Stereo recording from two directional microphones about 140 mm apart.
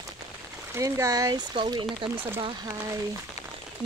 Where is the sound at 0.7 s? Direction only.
20° right (ahead or behind); by 2.7 s 35° right (ahead or behind).